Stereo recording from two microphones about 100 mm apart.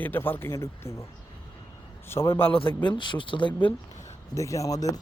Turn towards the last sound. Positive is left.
turn(degrees=35)  # may be behind; listen again after turning